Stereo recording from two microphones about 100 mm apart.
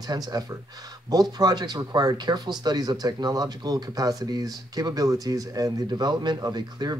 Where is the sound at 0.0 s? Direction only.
40° right (ahead or behind).